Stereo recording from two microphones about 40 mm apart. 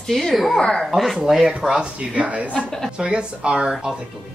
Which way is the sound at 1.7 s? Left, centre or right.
Right.